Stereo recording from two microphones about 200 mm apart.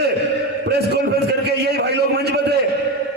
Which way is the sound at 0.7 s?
55° right (ahead or behind).